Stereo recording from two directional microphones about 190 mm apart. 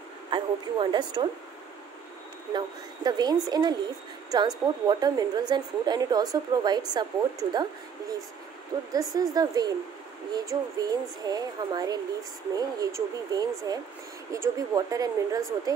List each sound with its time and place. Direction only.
0.3 s a woman's voice: 25° right (ahead or behind)
2.5 s a woman's voice: 20° right (ahead or behind)
8.9 s a woman's voice: 20° right (ahead or behind)